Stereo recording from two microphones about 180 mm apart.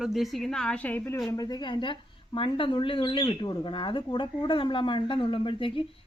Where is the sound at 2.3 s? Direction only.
30° left (ahead or behind).